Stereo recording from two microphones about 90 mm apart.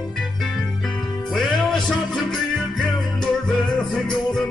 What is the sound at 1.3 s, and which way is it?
Music, centre (ahead or behind).